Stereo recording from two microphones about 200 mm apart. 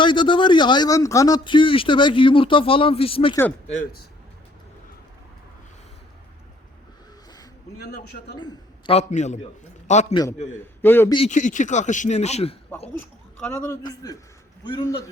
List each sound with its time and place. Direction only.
0.0 s speech: 25° left (ahead or behind)
8.4 s a man's voice: 25° left (ahead or behind)
10.6 s a man's voice: 10° left (ahead or behind)
11.3 s speech: 40° left (ahead or behind)
13.0 s a man's voice: 15° left (ahead or behind)